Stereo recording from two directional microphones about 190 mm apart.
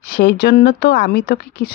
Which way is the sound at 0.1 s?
55° left (ahead or behind).